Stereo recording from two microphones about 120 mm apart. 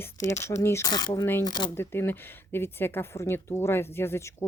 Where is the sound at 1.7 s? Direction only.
20° left (ahead or behind).